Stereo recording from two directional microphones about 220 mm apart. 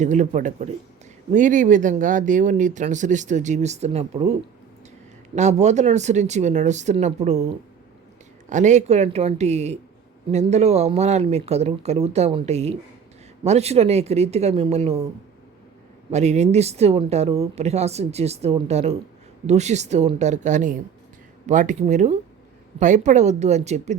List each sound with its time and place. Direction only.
0.0 s speech: 35° right (ahead or behind)
8.4 s speech: 35° right (ahead or behind)
16.1 s speech: 30° right (ahead or behind)